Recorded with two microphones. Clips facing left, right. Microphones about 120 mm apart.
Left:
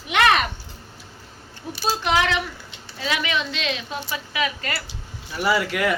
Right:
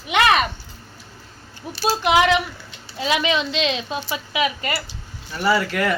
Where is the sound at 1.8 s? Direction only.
10° right (ahead or behind).